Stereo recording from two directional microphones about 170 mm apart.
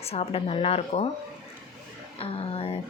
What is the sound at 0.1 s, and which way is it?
Speech, 35° left (ahead or behind).